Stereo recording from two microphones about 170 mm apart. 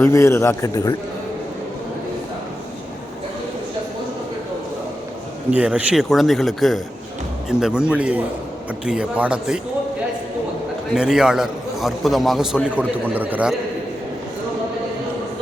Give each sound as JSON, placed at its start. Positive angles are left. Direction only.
{"t": 0.0, "sound": "a man's voice", "side_deg": 15}
{"t": 5.5, "sound": "a man's voice", "side_deg": -10}
{"t": 10.9, "sound": "a man's voice", "side_deg": -5}